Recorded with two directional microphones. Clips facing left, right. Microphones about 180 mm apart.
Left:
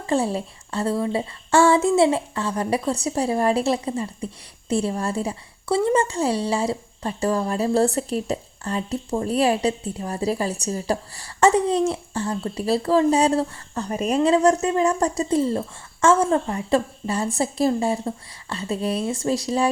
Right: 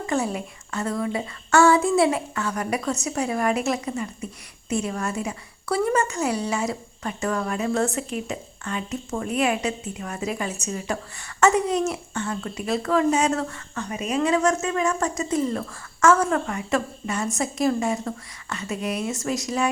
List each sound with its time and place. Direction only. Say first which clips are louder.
0.0 s a woman's voice: left 3 dB; 30° left (ahead or behind)